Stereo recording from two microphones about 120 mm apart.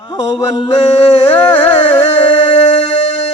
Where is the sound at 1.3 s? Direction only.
20° left (ahead or behind).